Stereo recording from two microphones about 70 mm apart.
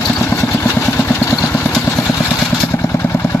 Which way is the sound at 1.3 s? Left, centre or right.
Left.